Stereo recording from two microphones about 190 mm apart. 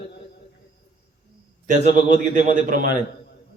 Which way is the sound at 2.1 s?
45° right (ahead or behind).